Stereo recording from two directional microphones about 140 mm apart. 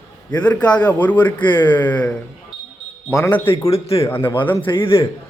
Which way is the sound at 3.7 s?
45° left (ahead or behind).